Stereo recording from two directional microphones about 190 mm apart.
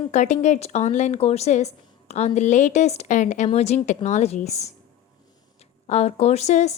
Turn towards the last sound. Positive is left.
turn(degrees=35)  # may be behind; listen again after turning